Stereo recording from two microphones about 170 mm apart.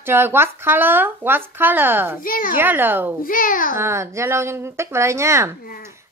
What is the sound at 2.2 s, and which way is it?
Speech, 55° left (ahead or behind).